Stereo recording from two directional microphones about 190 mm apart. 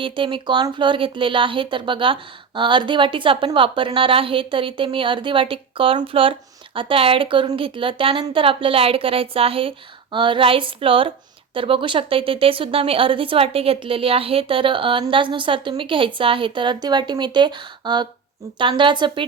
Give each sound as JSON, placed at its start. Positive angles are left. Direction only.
{"t": 0.0, "sound": "speech", "side_deg": -25}